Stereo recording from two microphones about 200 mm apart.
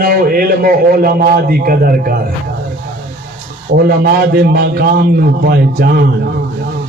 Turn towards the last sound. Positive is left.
turn(degrees=-50)  # may be behind; listen again after turning